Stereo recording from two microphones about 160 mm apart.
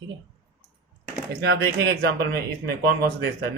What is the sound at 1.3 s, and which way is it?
Speech, 90° right.